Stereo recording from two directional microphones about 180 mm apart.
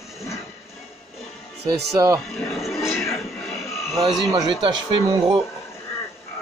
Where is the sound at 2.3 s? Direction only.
Centre (ahead or behind).